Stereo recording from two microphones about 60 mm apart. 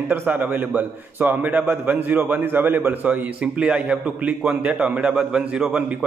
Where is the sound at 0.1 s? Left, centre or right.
Right.